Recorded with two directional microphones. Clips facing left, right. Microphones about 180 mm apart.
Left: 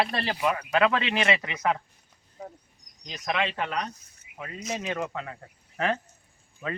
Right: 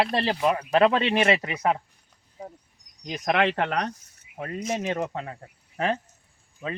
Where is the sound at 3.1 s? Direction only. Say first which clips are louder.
Right 6 dB; 60° right (ahead or behind).